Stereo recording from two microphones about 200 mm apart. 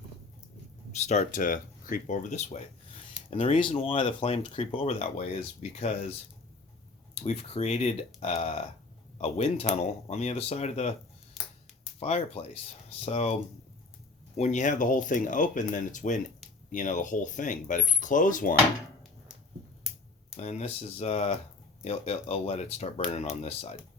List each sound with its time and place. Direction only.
0.9 s speech: 35° left (ahead or behind)
11.4 s finger snapping: centre (ahead or behind)
11.9 s speech: 30° left (ahead or behind)
19.9 s finger snapping: 5° right (ahead or behind)
20.3 s speech: 35° left (ahead or behind)